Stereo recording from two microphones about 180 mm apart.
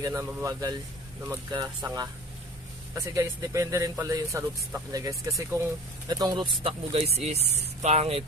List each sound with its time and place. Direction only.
0.0 s speech: 15° right (ahead or behind); by 8.2 s 35° right (ahead or behind)